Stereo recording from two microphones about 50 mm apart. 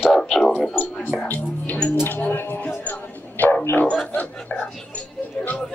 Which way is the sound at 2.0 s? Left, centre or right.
Left.